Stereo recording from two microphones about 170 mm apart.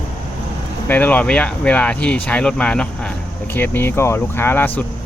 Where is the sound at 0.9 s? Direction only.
10° left (ahead or behind).